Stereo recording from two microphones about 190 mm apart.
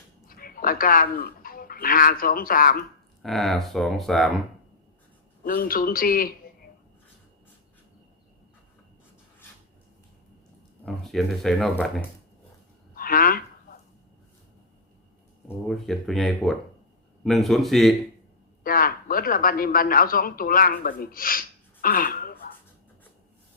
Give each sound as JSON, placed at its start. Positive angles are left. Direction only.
{"t": 0.3, "sound": "speech", "side_deg": 50}
{"t": 3.2, "sound": "speech", "side_deg": 0}
{"t": 5.4, "sound": "a man's voice", "side_deg": 50}
{"t": 10.8, "sound": "speech", "side_deg": 0}
{"t": 13.0, "sound": "speech", "side_deg": 50}
{"t": 15.6, "sound": "speech", "side_deg": 0}
{"t": 18.6, "sound": "a man's voice", "side_deg": 50}